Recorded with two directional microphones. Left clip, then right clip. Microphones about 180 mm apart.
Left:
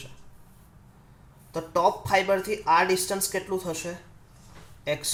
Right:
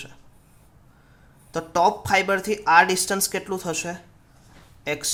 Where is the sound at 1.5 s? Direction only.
50° right (ahead or behind).